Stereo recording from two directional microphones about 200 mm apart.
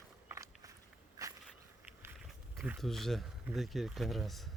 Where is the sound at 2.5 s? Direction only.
5° right (ahead or behind).